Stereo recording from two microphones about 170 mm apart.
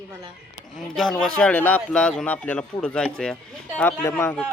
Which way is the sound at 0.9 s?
Centre (ahead or behind).